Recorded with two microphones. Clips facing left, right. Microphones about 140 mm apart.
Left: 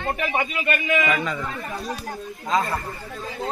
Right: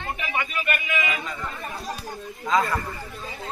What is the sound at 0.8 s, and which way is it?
Speech, 50° left (ahead or behind).